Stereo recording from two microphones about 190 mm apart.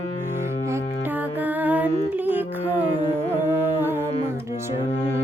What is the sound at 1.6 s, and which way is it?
Music, 10° right (ahead or behind).